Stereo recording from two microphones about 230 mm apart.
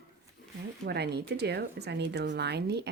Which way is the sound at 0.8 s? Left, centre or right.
Right.